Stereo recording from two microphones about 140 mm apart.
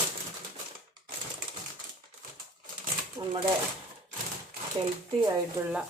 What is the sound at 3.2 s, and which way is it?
Shuffling cards, 25° right (ahead or behind).